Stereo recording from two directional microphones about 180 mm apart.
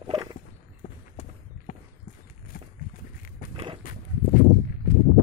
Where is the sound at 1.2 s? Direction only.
40° left (ahead or behind).